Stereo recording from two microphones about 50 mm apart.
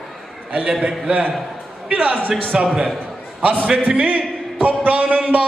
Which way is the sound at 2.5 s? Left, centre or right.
Centre.